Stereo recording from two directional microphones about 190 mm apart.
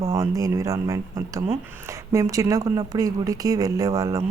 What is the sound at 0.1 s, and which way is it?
Speech, 20° right (ahead or behind).